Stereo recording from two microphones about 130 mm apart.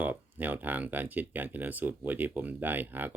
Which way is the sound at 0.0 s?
15° right (ahead or behind).